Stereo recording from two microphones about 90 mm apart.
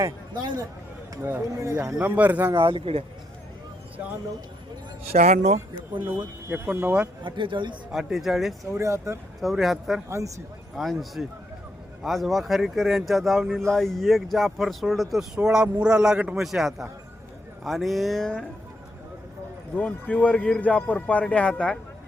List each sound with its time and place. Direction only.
0.0 s speech: 45° right (ahead or behind)
1.2 s speech: 25° right (ahead or behind)
2.0 s a man's voice: 15° right (ahead or behind)
2.6 s speech: 75° right (ahead or behind)
6.5 s speech: 20° right (ahead or behind)
7.3 s a man's voice: 65° right (ahead or behind)
7.9 s speech: centre (ahead or behind)
8.7 s speech: 35° right (ahead or behind)
9.4 s speech: centre (ahead or behind)
10.1 s speech: 35° right (ahead or behind)
10.8 s a man's voice: centre (ahead or behind)
19.7 s a man's voice: 15° left (ahead or behind)